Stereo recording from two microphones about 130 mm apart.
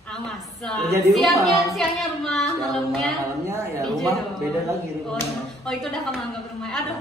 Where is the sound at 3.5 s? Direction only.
25° right (ahead or behind).